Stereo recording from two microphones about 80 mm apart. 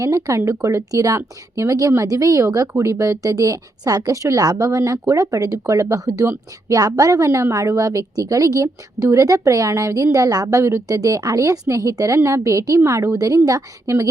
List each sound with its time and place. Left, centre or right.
0.3 s a woman's voice: right